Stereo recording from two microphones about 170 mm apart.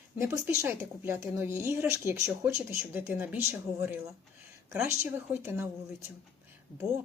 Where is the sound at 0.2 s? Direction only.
15° right (ahead or behind).